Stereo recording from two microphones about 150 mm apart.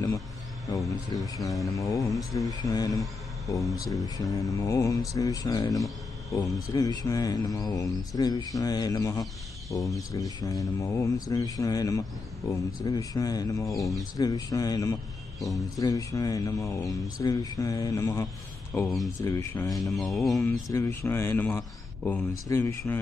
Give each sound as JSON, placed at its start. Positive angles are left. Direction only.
{"t": 0.7, "sound": "speech", "side_deg": 25}
{"t": 15.4, "sound": "speech", "side_deg": 0}
{"t": 15.8, "sound": "speech", "side_deg": 20}
{"t": 19.9, "sound": "speech", "side_deg": 0}
{"t": 20.7, "sound": "speech", "side_deg": 20}